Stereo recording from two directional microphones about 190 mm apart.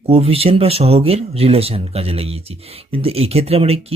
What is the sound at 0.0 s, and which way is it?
Speech, 30° right (ahead or behind).